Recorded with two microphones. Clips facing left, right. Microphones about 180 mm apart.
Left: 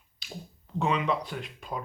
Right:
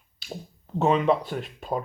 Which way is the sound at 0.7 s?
40° right (ahead or behind).